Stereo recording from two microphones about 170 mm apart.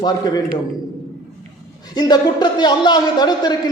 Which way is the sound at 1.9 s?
25° left (ahead or behind).